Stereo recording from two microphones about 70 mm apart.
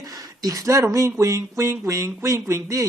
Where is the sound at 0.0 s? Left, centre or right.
Right.